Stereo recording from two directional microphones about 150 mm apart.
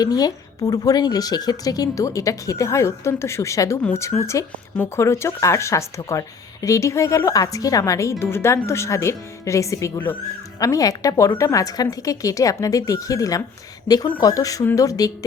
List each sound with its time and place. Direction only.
0.0 s speech: 25° left (ahead or behind)